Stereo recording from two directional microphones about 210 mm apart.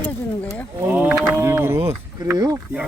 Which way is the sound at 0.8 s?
10° right (ahead or behind).